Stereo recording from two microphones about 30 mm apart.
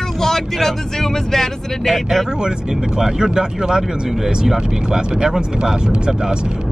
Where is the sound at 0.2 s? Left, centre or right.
Centre.